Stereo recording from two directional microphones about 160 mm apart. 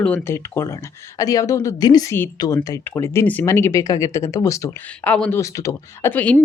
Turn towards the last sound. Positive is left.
turn(degrees=10)  # may be behind; listen again after turning